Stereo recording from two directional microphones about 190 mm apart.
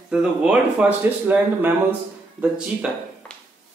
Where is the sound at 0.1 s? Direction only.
5° right (ahead or behind).